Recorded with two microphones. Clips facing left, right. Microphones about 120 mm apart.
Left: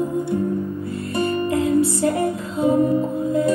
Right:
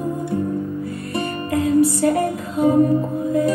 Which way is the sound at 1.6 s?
25° left (ahead or behind).